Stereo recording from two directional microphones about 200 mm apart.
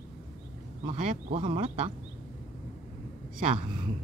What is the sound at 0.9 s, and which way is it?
Speech, 35° right (ahead or behind).